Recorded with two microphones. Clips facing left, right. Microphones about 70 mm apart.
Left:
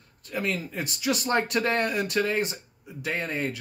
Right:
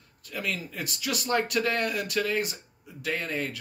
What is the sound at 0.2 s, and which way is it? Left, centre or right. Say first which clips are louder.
Speech: left 4 dB; left.